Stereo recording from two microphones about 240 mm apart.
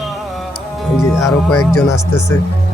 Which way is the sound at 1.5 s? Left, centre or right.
Left.